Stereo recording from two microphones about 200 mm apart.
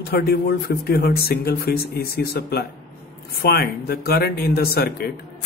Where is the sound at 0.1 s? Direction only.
50° left (ahead or behind).